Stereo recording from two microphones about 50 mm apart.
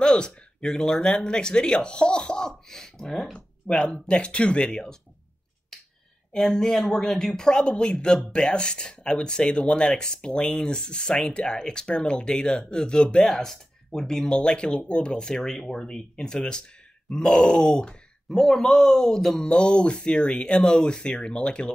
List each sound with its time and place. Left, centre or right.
0.0 s speech: centre
6.3 s speech: centre